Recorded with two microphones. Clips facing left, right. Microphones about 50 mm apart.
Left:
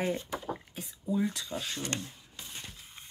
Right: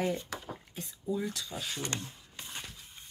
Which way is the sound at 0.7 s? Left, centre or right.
Centre.